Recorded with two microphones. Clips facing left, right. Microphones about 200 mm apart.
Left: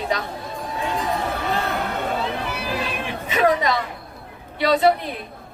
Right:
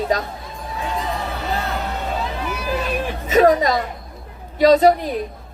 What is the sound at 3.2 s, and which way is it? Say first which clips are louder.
A woman's voice: right 5 dB; 40° right (ahead or behind).